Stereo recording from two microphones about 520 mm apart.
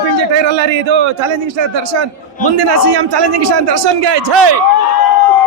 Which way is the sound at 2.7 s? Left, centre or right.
Right.